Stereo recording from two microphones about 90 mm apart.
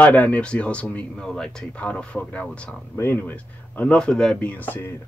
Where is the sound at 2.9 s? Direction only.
25° left (ahead or behind).